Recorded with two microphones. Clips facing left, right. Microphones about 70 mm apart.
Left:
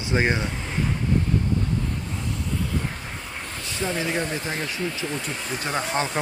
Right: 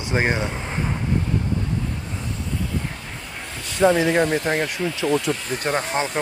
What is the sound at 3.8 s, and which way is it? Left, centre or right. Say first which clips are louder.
Speech: right 10 dB; right.